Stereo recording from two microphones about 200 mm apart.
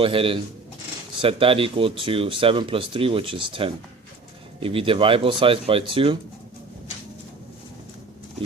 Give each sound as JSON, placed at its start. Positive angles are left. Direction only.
{"t": 0.0, "sound": "speech", "side_deg": -25}